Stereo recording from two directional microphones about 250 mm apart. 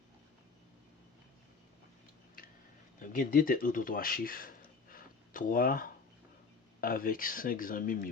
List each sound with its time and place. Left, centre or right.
3.0 s speech: left